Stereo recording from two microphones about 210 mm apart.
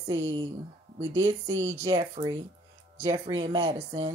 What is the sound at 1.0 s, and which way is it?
Speech, 15° right (ahead or behind).